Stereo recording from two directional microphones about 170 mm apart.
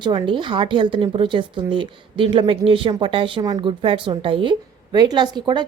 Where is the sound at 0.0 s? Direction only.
25° right (ahead or behind).